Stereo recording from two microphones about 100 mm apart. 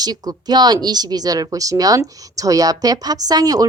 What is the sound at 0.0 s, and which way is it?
A woman's voice, 40° right (ahead or behind).